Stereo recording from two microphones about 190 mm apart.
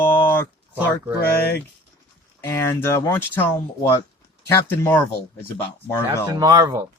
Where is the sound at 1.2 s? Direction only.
60° left (ahead or behind).